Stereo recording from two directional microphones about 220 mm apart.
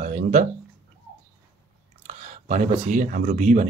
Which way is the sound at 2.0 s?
35° right (ahead or behind).